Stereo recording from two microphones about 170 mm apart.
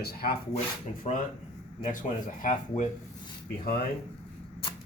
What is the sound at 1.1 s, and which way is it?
Speech, 40° left (ahead or behind).